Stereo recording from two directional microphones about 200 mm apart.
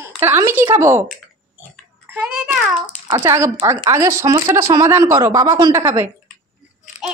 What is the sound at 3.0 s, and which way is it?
A child's voice, 15° right (ahead or behind).